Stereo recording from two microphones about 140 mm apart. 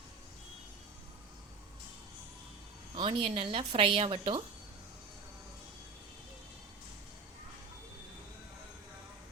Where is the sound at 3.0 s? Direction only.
40° right (ahead or behind).